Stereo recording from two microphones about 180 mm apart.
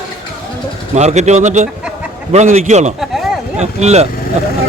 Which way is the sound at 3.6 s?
40° right (ahead or behind).